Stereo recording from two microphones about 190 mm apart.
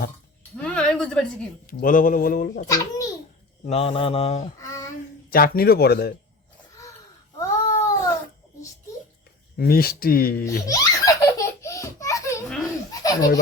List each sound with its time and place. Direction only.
0.5 s a sound: 5° left (ahead or behind)
1.6 s speech: 45° left (ahead or behind)
2.6 s a child's voice: 20° left (ahead or behind)
3.7 s speech: 30° left (ahead or behind)
5.3 s speech: 50° left (ahead or behind)
7.3 s babbling: 15° left (ahead or behind)
9.6 s speech: 50° left (ahead or behind)
10.4 s laughter: 20° left (ahead or behind)
12.9 s a sound: 20° left (ahead or behind)